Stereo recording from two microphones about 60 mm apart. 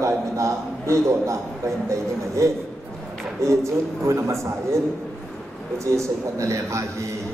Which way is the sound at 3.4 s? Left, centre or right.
Right.